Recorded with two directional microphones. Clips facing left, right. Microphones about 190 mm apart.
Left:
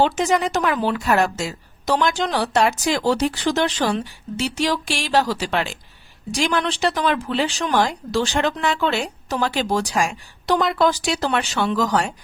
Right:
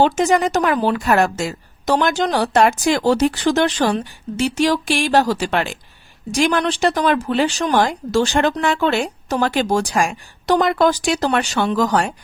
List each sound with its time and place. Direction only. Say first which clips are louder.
0.0 s a woman's voice: right 3 dB; 45° right (ahead or behind)